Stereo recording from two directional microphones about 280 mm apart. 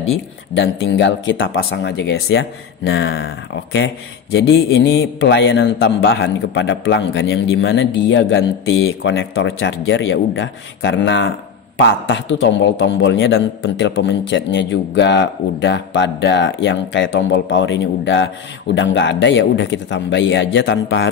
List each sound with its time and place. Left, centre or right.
0.6 s a man's voice: left
8.6 s speech: left
9.0 s a man's voice: left